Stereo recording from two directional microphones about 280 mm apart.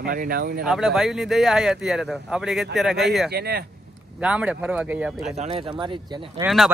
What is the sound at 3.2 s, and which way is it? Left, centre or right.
Speech, right.